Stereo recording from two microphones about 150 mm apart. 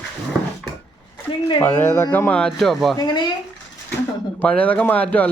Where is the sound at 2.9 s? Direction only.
30° left (ahead or behind).